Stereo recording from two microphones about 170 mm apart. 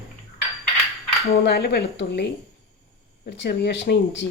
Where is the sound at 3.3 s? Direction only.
85° left.